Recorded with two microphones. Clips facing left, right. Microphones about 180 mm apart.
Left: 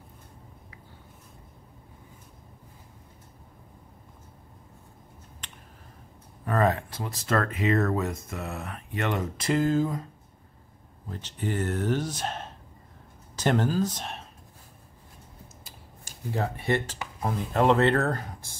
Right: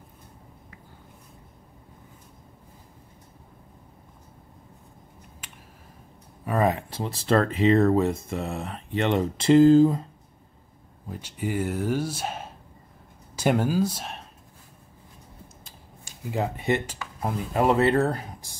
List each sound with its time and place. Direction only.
5.4 s finger snapping: 10° right (ahead or behind)
6.4 s speech: 10° right (ahead or behind)
6.9 s speech: 25° right (ahead or behind)
11.1 s speech: 10° right (ahead or behind)
16.3 s speech: 15° right (ahead or behind)